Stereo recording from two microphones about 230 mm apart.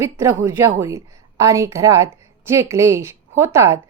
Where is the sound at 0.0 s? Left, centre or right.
Centre.